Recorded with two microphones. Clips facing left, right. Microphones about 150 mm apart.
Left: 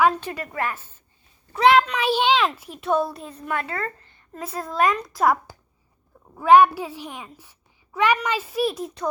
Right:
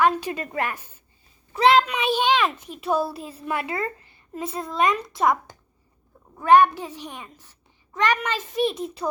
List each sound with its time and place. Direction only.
0.2 s a woman's voice: 15° right (ahead or behind)
1.5 s a woman's voice: centre (ahead or behind)